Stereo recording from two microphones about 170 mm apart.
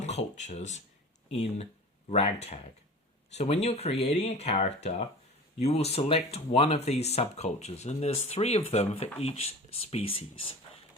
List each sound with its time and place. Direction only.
0.0 s speech: 40° left (ahead or behind)
2.0 s speech: 35° left (ahead or behind)
3.3 s speech: 40° left (ahead or behind)